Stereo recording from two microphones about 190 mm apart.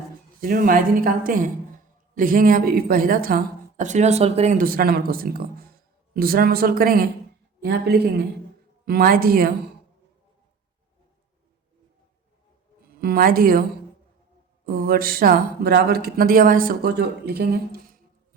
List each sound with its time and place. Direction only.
0.4 s a woman's voice: 50° right (ahead or behind)
13.0 s a woman's voice: 55° right (ahead or behind)
14.7 s a woman's voice: 50° right (ahead or behind)